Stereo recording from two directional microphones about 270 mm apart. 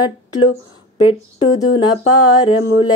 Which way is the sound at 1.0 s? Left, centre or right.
Left.